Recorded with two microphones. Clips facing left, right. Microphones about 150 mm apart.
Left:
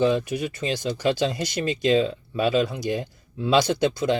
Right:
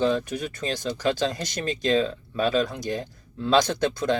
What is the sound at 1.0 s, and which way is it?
Speech, 45° right (ahead or behind).